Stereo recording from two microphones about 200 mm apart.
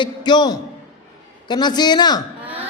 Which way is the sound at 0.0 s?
20° left (ahead or behind).